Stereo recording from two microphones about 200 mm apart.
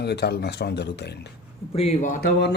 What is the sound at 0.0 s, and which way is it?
Speech, 55° left (ahead or behind).